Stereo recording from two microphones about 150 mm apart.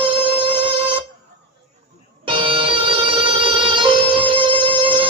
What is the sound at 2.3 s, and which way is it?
Music, 35° right (ahead or behind).